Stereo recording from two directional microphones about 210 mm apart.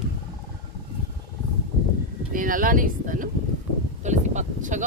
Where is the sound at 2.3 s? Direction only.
40° right (ahead or behind).